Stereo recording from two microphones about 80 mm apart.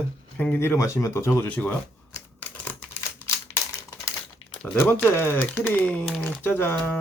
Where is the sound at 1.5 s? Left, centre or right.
Centre.